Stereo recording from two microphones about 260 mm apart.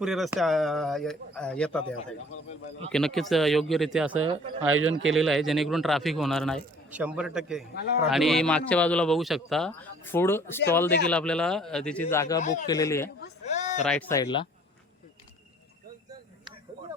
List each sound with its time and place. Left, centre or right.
0.0 s a man's voice: centre
4.7 s speech: right
5.1 s a man's voice: centre
12.4 s a man's voice: left
12.6 s speech: centre
13.5 s a sound: left
13.8 s speech: centre